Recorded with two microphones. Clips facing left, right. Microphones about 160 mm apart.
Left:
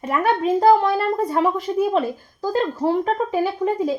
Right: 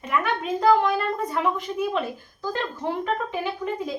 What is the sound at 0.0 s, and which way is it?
A woman's voice, 45° left (ahead or behind).